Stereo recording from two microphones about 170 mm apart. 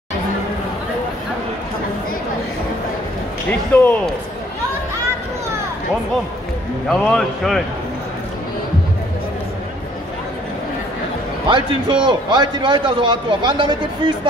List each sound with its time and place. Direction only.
3.4 s speech: 10° left (ahead or behind)
6.9 s a man's voice: centre (ahead or behind)
11.4 s a man's voice: 30° right (ahead or behind)